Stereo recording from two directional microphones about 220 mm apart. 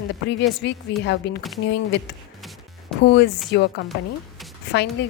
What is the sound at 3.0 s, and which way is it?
A woman's voice, 50° left (ahead or behind).